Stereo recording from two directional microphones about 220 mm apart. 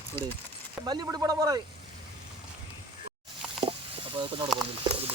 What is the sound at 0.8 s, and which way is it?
Speech, 20° right (ahead or behind).